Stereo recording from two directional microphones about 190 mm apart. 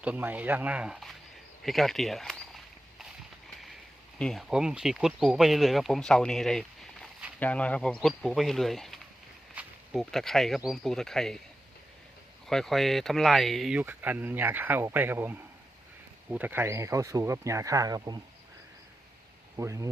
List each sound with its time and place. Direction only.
0.0 s speech: 10° right (ahead or behind)
4.2 s speech: centre (ahead or behind)
12.5 s speech: centre (ahead or behind); by 18.2 s 20° right (ahead or behind)
19.5 s speech: 15° right (ahead or behind)